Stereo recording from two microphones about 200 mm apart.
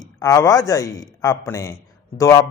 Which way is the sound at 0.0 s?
20° left (ahead or behind).